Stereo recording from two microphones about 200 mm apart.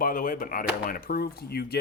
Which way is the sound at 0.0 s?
45° left (ahead or behind).